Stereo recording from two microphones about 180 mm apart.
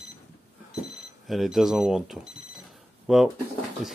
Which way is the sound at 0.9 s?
Centre (ahead or behind).